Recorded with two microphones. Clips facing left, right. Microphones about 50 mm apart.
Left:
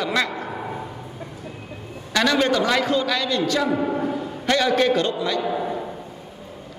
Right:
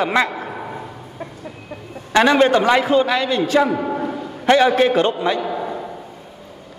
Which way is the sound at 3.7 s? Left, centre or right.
Centre.